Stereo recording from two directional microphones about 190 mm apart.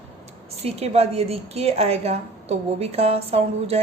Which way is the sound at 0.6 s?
35° right (ahead or behind).